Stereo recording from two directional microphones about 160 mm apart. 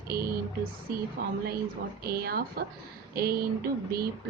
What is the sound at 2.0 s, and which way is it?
Speech, 75° right (ahead or behind).